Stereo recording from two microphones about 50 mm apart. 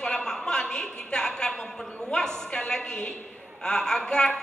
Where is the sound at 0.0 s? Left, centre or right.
Centre.